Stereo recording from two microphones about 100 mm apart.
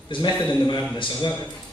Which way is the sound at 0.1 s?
50° left (ahead or behind).